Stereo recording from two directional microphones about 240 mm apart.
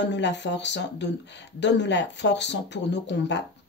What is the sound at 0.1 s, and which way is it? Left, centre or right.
Speech, left.